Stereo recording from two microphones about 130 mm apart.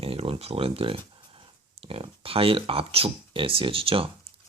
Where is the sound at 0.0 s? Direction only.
50° right (ahead or behind).